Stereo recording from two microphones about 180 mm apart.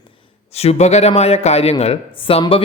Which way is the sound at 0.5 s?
35° left (ahead or behind).